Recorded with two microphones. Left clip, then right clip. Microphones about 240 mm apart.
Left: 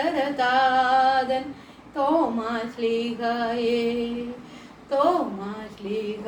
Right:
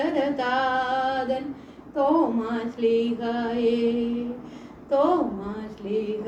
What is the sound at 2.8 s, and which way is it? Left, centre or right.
Female singing, centre.